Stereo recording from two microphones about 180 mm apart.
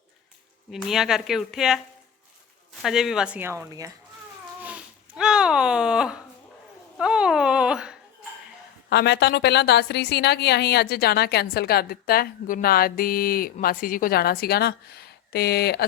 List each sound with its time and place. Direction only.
0.7 s speech: centre (ahead or behind)
2.8 s speech: centre (ahead or behind); by 3.9 s 20° right (ahead or behind)
4.6 s a sound: 5° right (ahead or behind)
8.9 s a woman's voice: 70° left (ahead or behind)